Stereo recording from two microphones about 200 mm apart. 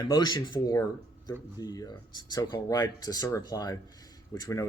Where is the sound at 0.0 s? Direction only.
20° left (ahead or behind).